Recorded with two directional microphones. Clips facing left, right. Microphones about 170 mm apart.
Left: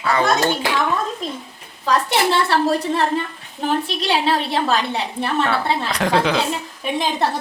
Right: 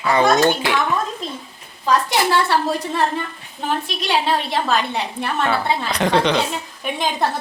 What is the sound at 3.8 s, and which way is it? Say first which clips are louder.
A woman's voice: left 1 dB; 35° left (ahead or behind).